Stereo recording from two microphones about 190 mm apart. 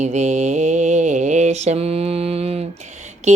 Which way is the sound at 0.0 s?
35° right (ahead or behind).